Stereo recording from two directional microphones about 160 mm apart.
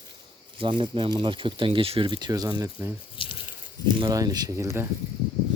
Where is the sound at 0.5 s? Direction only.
30° right (ahead or behind).